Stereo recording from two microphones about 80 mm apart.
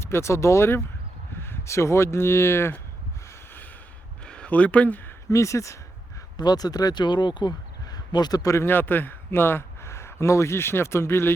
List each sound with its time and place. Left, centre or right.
0.0 s speech: left
4.3 s speech: centre
5.3 s speech: left
6.3 s speech: left
8.5 s a man's voice: left